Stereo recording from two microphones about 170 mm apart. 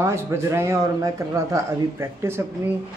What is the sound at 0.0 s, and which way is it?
A man's voice, 15° right (ahead or behind).